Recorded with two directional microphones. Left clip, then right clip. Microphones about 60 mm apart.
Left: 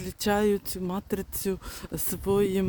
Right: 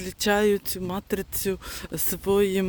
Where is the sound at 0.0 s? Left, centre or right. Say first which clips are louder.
Right 3 dB; left.